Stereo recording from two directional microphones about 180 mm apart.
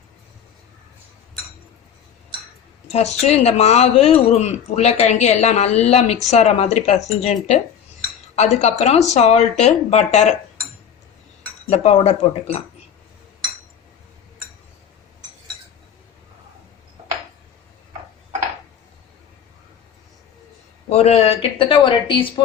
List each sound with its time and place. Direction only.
2.9 s speech: 35° left (ahead or behind)
8.6 s speech: 35° left (ahead or behind)
11.7 s speech: 35° left (ahead or behind)
20.9 s speech: 35° left (ahead or behind)